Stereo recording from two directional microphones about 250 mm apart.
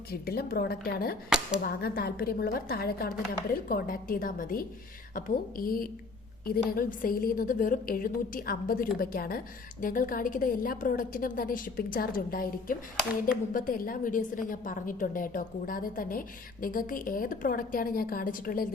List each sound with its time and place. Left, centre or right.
0.1 s a woman's voice: left